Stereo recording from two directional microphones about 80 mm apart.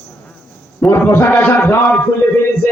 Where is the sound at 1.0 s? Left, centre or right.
Left.